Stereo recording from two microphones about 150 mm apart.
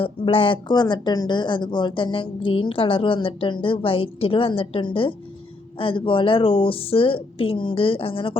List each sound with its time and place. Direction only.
0.0 s speech: 35° left (ahead or behind)